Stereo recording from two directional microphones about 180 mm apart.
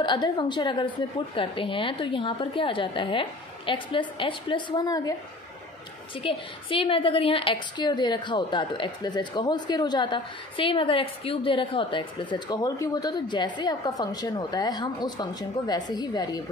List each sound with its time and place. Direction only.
0.0 s a woman's voice: 25° left (ahead or behind)
6.1 s a woman's voice: 30° left (ahead or behind)